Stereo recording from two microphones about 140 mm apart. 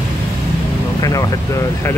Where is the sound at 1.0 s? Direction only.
25° left (ahead or behind).